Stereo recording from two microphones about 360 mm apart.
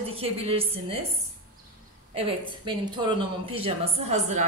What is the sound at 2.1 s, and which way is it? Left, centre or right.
A woman's voice, centre.